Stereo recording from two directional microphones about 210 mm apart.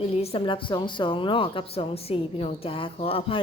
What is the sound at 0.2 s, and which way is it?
A woman's voice, 25° left (ahead or behind).